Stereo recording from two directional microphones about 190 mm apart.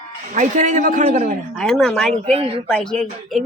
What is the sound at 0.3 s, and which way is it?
A man's voice, 40° right (ahead or behind).